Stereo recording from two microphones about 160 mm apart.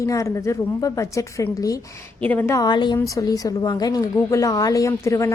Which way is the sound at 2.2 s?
10° left (ahead or behind).